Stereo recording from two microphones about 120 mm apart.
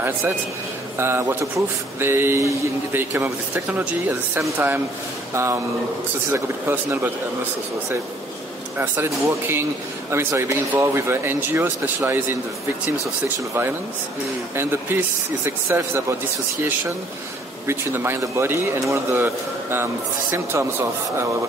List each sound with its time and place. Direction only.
0.9 s a man's voice: 20° right (ahead or behind)
8.7 s a man's voice: 15° right (ahead or behind)
14.5 s a man's voice: 20° right (ahead or behind)
17.6 s a man's voice: 20° right (ahead or behind)